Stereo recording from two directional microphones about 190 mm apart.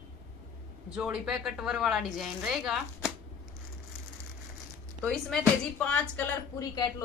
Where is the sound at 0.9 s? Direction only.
5° right (ahead or behind).